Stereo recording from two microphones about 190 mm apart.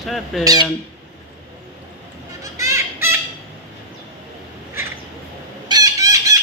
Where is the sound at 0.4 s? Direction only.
20° right (ahead or behind).